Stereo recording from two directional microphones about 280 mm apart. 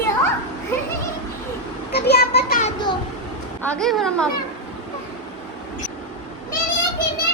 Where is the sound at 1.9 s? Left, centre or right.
Left.